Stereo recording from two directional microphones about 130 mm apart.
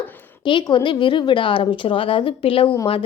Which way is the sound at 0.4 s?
40° left (ahead or behind).